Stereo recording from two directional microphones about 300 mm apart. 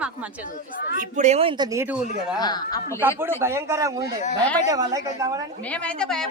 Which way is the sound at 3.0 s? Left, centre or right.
Centre.